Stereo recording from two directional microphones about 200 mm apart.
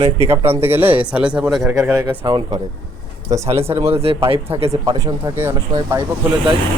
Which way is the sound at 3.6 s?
30° right (ahead or behind).